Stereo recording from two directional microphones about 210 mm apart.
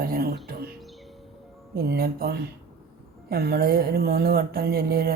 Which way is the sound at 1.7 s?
45° right (ahead or behind).